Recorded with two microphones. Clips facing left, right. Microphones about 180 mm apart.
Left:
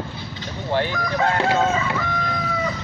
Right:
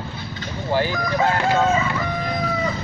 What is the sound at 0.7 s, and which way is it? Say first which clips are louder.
Chicken: right 1 dB; 5° right (ahead or behind).